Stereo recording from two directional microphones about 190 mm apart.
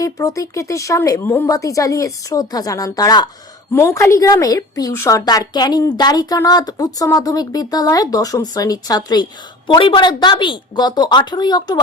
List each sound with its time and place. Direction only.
0.0 s speech: 15° left (ahead or behind)